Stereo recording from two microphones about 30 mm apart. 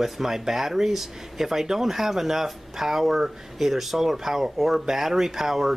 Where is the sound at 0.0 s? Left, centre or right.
Centre.